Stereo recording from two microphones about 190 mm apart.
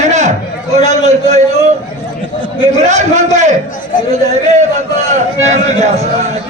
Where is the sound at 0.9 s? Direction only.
35° right (ahead or behind).